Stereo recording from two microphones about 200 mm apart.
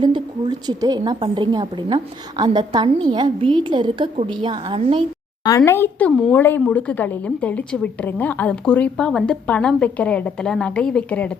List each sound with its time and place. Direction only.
0.0 s a woman's voice: 20° right (ahead or behind)
5.5 s a child's voice: 15° left (ahead or behind)